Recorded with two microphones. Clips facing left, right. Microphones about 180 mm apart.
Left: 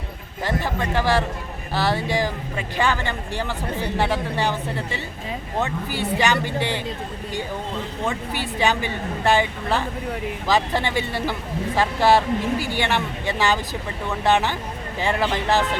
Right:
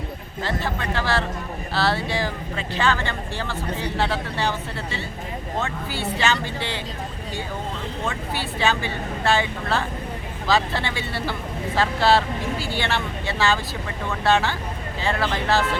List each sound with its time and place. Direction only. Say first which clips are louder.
0.4 s speech: left 2 dB; 15° left (ahead or behind)
8.5 s speech: left 2 dB; 15° left (ahead or behind)